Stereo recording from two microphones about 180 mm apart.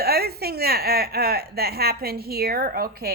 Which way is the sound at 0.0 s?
60° right (ahead or behind).